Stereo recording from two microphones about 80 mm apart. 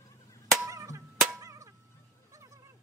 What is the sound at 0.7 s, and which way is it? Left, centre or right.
Music, right.